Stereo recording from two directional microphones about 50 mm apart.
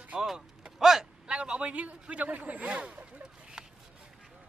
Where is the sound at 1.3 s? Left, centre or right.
Right.